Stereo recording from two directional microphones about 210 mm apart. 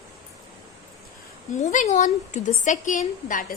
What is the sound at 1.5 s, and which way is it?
A woman's voice, 35° left (ahead or behind).